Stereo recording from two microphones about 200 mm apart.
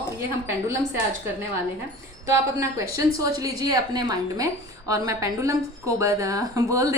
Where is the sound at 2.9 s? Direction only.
15° right (ahead or behind).